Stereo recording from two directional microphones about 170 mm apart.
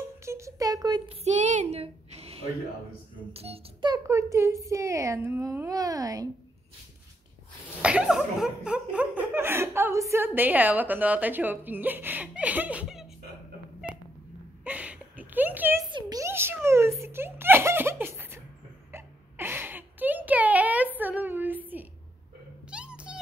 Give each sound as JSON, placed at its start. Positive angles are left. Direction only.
{"t": 0.2, "sound": "a child's voice", "side_deg": -15}
{"t": 1.0, "sound": "speech", "side_deg": -40}
{"t": 3.9, "sound": "a child's voice", "side_deg": -15}
{"t": 7.8, "sound": "laughter", "side_deg": -5}
{"t": 14.6, "sound": "a sound", "side_deg": -10}
{"t": 16.6, "sound": "giggle", "side_deg": -15}
{"t": 18.9, "sound": "hiccup", "side_deg": -15}
{"t": 22.7, "sound": "a sound", "side_deg": -5}